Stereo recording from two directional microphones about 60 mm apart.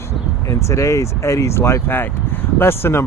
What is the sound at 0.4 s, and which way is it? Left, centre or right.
Speech, left.